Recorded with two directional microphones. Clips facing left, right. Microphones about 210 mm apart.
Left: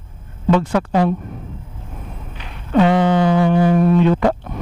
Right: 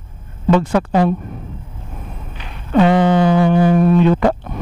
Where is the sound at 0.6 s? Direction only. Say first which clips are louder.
Right 3 dB; 20° right (ahead or behind).